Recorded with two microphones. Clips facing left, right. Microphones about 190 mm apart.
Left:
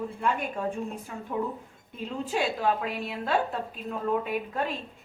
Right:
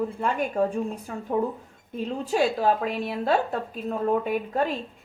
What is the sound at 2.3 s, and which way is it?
A woman's voice, 40° right (ahead or behind).